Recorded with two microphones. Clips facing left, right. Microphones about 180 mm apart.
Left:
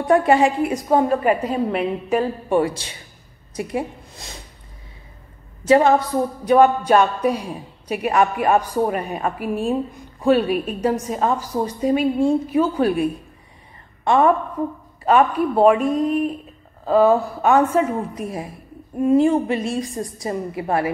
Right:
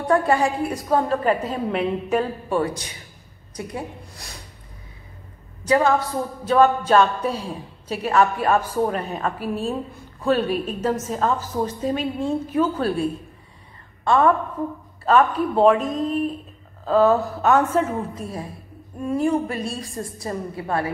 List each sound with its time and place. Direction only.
0.0 s speech: 20° left (ahead or behind)
2.5 s a woman's voice: 25° left (ahead or behind)
5.7 s a woman's voice: 20° left (ahead or behind)